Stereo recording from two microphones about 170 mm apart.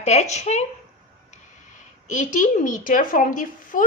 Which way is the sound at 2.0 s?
45° left (ahead or behind).